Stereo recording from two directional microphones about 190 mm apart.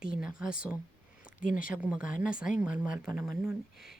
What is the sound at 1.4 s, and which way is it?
Speech, 45° left (ahead or behind).